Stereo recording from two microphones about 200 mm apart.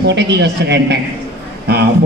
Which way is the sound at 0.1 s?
60° right (ahead or behind).